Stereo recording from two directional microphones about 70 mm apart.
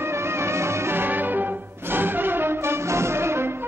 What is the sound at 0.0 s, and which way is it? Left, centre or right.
Music, right.